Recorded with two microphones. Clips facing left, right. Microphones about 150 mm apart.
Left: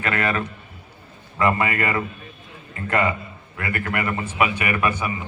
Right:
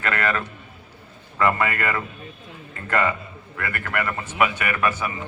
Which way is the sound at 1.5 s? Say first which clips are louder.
Left 1 dB; 15° left (ahead or behind).